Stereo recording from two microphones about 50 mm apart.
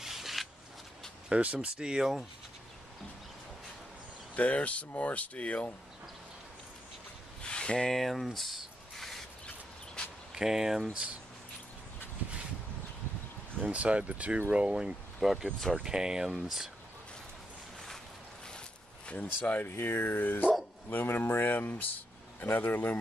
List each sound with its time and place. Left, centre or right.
0.0 s a sound: centre
1.3 s speech: right; by 2.2 s centre
4.4 s speech: left
7.4 s a sound: centre
8.0 s a sound: centre
10.3 s speech: centre
13.6 s speech: right
15.1 s speech: centre
19.0 s speech: left
19.7 s speech: left